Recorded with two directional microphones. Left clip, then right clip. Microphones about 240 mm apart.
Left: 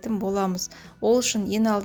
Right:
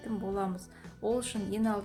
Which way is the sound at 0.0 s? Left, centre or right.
Left.